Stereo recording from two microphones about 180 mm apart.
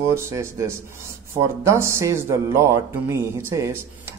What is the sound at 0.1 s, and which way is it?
Speech, 15° right (ahead or behind).